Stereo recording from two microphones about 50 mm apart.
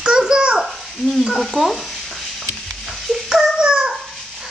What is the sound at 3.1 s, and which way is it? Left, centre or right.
Dog, centre.